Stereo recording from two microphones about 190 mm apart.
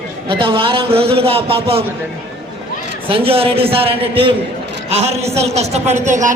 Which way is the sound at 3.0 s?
30° right (ahead or behind).